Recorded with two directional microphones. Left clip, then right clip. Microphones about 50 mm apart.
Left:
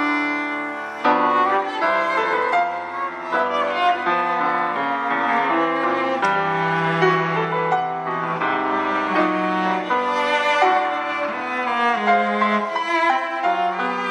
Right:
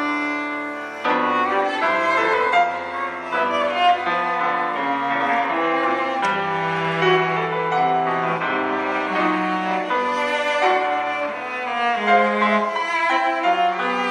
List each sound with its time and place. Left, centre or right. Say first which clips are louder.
1.0 s music: left 3 dB; left
7.0 s music: right 2 dB; left
10.5 s music: left 1 dB; left
11.8 s music: right 2 dB; left